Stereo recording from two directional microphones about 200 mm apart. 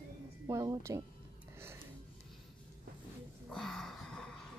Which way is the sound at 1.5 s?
10° right (ahead or behind).